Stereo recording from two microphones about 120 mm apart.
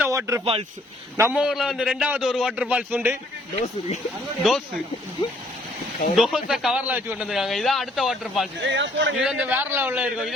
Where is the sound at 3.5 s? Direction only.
65° left (ahead or behind).